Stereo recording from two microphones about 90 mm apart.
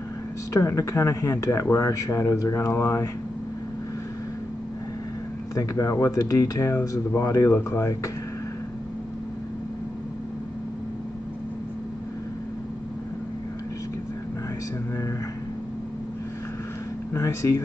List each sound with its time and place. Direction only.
0.5 s speech: 35° left (ahead or behind)
5.5 s speech: 40° left (ahead or behind)
17.1 s a sound: 30° left (ahead or behind)